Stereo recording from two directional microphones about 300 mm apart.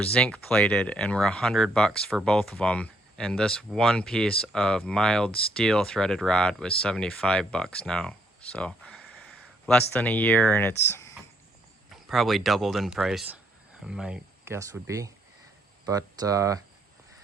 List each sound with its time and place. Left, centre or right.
0.0 s speech: centre